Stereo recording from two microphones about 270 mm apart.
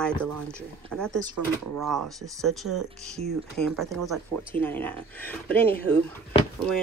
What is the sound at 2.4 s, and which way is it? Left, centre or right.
Speech, centre.